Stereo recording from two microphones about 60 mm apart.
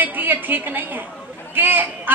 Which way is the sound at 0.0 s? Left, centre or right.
Right.